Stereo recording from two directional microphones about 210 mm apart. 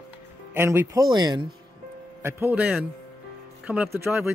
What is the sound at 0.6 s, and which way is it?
Speech, 10° right (ahead or behind).